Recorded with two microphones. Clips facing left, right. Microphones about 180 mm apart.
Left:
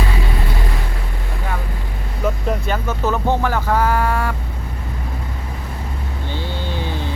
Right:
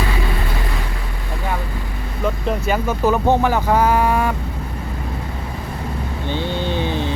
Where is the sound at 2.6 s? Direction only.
10° right (ahead or behind).